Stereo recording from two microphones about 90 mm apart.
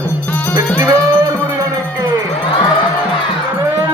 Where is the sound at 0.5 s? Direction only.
40° right (ahead or behind).